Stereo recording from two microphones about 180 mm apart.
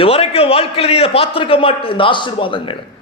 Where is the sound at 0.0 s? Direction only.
30° left (ahead or behind).